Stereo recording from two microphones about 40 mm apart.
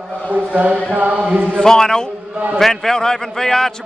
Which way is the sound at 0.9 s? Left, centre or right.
Right.